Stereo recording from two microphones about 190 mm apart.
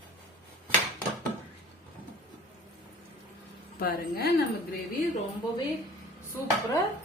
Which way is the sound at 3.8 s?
55° left (ahead or behind).